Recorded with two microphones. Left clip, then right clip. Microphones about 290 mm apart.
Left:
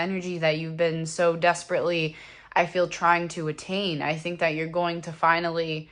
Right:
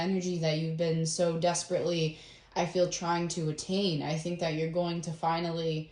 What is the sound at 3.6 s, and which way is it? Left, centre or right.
Speech, centre.